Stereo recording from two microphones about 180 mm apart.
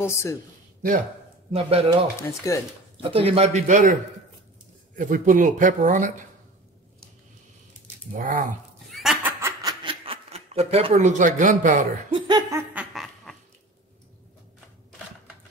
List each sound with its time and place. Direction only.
0.0 s speech: 15° left (ahead or behind)
1.5 s a man's voice: 35° right (ahead or behind)
2.2 s speech: 15° left (ahead or behind)
3.0 s a man's voice: 30° right (ahead or behind)
4.9 s speech: 45° right (ahead or behind)
8.2 s speech: 45° right (ahead or behind)
8.9 s snicker: 5° right (ahead or behind); by 11.9 s 45° right (ahead or behind)
12.1 s laughter: 20° right (ahead or behind)
12.9 s a sound: centre (ahead or behind)